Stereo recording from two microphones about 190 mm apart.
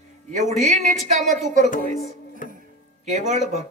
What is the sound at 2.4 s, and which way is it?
Music, 45° left (ahead or behind).